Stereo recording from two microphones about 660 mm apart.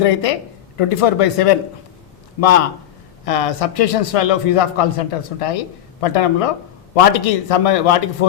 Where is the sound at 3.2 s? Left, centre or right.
Left.